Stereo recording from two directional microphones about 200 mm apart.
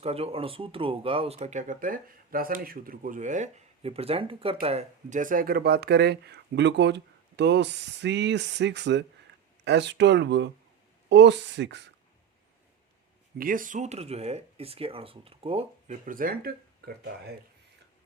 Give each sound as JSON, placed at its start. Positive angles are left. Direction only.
{"t": 0.0, "sound": "speech", "side_deg": -30}
{"t": 1.4, "sound": "speech", "side_deg": -40}
{"t": 13.4, "sound": "speech", "side_deg": -45}
{"t": 16.0, "sound": "speech", "side_deg": -45}